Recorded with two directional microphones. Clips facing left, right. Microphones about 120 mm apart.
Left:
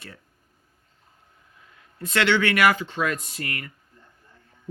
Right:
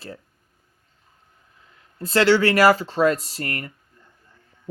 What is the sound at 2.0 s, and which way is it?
Speech, 30° right (ahead or behind).